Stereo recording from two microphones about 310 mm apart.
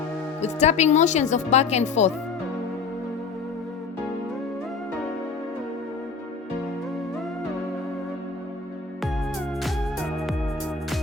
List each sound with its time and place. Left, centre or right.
0.4 s speech: left